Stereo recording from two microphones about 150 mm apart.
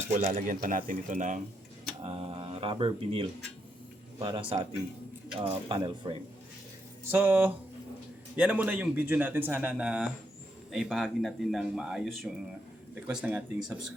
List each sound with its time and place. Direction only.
0.3 s speech: 65° right (ahead or behind)
2.0 s speech: 40° right (ahead or behind)
7.1 s speech: 15° right (ahead or behind)
12.9 s speech: 10° right (ahead or behind)